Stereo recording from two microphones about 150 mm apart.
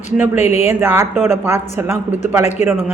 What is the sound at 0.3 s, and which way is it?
Speech, 45° left (ahead or behind).